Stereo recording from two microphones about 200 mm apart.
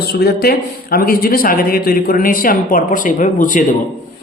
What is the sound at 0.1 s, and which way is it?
Speech, 50° left (ahead or behind).